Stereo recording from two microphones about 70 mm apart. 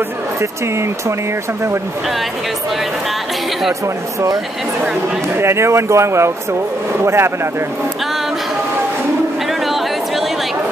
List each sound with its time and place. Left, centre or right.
0.4 s speech: right
5.4 s speech: right
9.5 s a sound: centre